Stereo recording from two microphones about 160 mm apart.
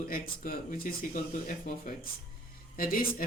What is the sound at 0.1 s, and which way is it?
Speech, 60° left (ahead or behind).